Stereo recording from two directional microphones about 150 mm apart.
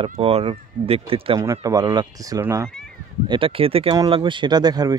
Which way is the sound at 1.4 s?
20° right (ahead or behind).